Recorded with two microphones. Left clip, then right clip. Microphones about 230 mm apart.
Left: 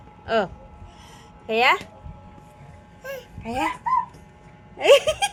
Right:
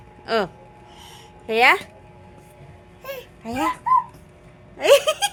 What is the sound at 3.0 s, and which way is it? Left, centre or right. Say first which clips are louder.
Baby cry: right 1 dB; centre.